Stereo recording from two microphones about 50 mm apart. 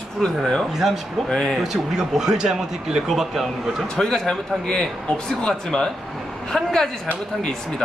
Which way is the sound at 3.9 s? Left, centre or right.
Centre.